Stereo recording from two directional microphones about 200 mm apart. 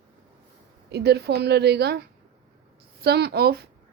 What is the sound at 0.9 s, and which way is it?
A woman's voice, 55° right (ahead or behind).